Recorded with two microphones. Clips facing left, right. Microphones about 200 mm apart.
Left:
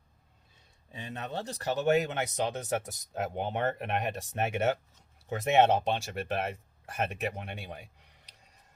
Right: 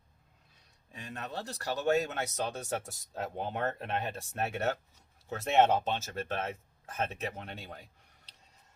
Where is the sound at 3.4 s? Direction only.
20° left (ahead or behind).